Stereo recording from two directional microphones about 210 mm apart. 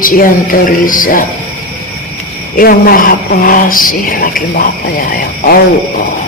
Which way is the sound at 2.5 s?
45° left (ahead or behind).